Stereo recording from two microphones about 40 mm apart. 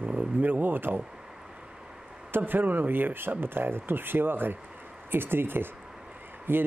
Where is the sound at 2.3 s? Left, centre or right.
Right.